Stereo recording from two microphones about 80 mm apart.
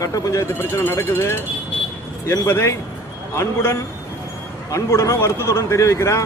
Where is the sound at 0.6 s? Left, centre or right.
Left.